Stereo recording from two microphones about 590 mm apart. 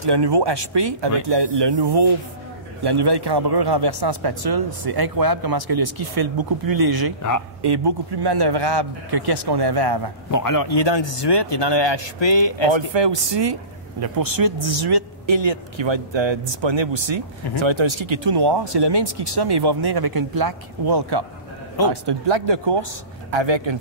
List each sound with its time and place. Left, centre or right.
0.0 s a man's voice: right
10.3 s speech: left
12.7 s a man's voice: right